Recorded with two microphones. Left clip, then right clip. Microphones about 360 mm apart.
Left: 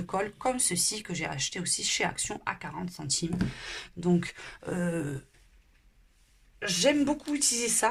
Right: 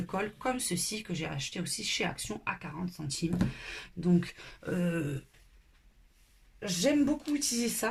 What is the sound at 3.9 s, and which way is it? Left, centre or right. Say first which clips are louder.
Speech: left 2 dB; centre.